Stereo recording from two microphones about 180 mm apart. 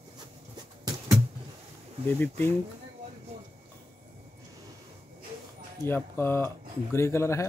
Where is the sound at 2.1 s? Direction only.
10° left (ahead or behind).